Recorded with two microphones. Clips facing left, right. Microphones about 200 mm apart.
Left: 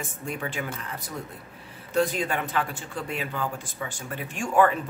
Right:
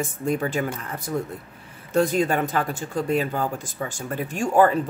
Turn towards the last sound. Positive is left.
turn(degrees=-35)  # may be behind; listen again after turning